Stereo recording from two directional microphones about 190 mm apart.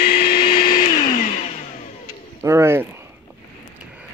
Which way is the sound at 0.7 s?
45° left (ahead or behind).